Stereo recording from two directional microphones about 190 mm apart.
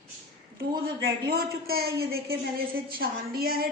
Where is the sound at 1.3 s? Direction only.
55° right (ahead or behind).